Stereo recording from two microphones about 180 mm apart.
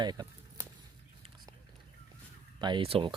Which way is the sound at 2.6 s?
25° right (ahead or behind).